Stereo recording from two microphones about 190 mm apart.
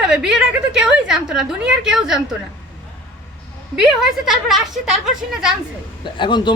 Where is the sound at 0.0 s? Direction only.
5° right (ahead or behind).